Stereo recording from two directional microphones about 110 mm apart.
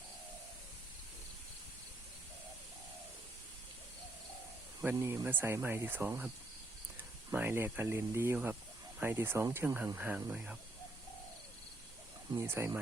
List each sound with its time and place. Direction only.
4.9 s speech: 25° right (ahead or behind)
12.3 s speech: 20° right (ahead or behind)